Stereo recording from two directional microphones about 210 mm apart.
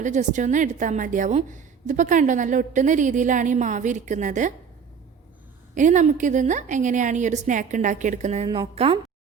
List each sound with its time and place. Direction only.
0.0 s a woman's voice: 35° right (ahead or behind)
5.7 s a woman's voice: 35° right (ahead or behind)